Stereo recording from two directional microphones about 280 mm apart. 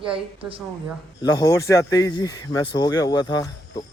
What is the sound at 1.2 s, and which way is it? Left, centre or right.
Speech, centre.